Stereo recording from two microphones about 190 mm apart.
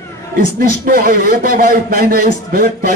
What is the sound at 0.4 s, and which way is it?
A man's voice, 50° right (ahead or behind).